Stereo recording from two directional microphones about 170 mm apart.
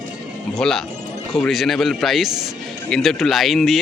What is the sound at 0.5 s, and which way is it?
Speech, 5° left (ahead or behind).